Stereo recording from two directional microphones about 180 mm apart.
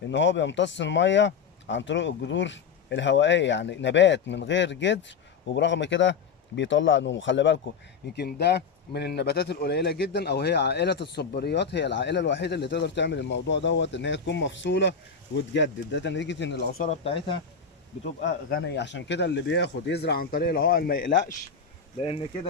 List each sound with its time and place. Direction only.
0.1 s speech: 85° left
8.1 s speech: 65° left (ahead or behind)
16.8 s speech: 35° left (ahead or behind)
18.5 s speech: 75° left (ahead or behind); by 21.1 s 55° left (ahead or behind)
21.9 s speech: 35° left (ahead or behind)